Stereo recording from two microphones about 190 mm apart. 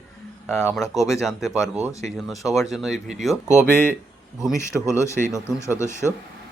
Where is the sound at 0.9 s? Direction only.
Centre (ahead or behind).